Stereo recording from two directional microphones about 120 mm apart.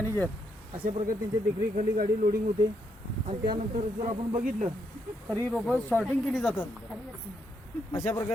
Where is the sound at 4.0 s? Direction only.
65° right (ahead or behind).